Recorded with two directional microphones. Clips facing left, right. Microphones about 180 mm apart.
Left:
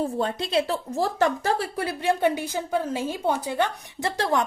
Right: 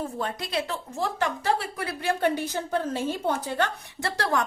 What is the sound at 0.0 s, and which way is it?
A woman's voice, 30° left (ahead or behind).